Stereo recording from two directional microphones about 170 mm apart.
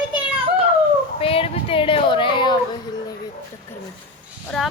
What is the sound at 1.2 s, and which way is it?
Speech, 35° left (ahead or behind).